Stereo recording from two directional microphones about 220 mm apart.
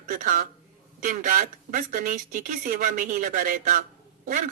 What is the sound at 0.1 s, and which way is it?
Speech, 35° right (ahead or behind).